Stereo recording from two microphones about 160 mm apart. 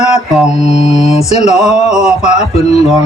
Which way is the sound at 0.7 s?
40° left (ahead or behind).